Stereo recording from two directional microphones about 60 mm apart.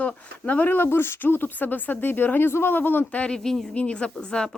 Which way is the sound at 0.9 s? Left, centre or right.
Left.